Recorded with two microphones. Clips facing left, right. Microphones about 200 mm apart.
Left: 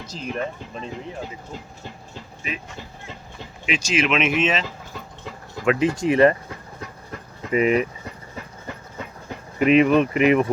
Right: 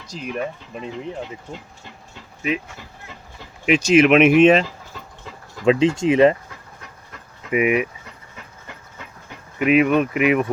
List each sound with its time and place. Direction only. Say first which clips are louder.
0.1 s speech: right 2 dB; 10° right (ahead or behind)
3.7 s speech: right 9 dB; 60° right (ahead or behind)
5.6 s speech: right 3 dB; 25° right (ahead or behind)
7.5 s speech: even; 10° right (ahead or behind)
9.6 s speech: left 1 dB; 5° right (ahead or behind)